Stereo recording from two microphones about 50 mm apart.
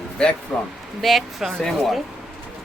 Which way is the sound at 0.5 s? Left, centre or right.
Centre.